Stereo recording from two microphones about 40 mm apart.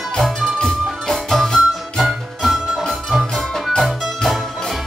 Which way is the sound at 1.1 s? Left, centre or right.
Centre.